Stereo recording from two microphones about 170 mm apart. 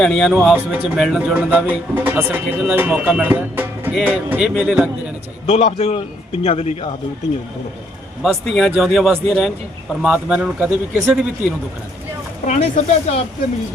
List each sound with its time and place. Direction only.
0.0 s speech: 5° left (ahead or behind)
1.3 s speech: 10° right (ahead or behind)
5.5 s a man's voice: 35° left (ahead or behind)
8.2 s speech: centre (ahead or behind)
12.5 s a man's voice: 45° left (ahead or behind)